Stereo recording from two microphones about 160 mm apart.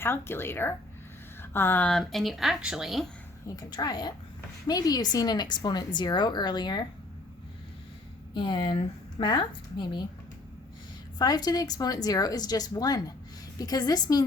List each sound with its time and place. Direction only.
0.0 s speech: 15° left (ahead or behind)
3.4 s a woman's voice: 25° left (ahead or behind)
8.3 s a woman's voice: 30° left (ahead or behind)
11.2 s a woman's voice: 25° left (ahead or behind)